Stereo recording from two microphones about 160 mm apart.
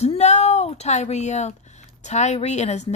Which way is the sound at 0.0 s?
45° left (ahead or behind).